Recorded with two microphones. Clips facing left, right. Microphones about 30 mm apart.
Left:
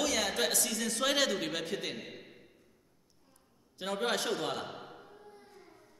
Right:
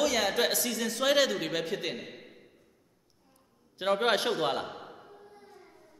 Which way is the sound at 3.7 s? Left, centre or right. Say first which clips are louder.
Right 6 dB; right.